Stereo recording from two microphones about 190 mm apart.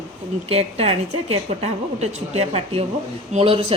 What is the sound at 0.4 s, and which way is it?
Speech, 30° right (ahead or behind).